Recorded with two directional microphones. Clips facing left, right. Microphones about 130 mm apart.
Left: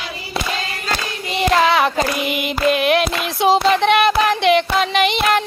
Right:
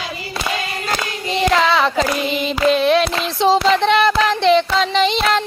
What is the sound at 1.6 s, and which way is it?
Child singing, 15° left (ahead or behind).